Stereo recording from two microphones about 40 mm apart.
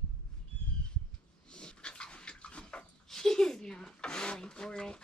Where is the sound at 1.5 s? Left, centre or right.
Left.